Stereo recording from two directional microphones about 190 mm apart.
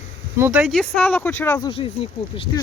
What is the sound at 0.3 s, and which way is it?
Speech, 10° right (ahead or behind).